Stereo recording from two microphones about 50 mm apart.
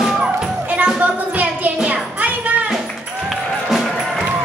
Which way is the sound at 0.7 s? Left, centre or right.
Right.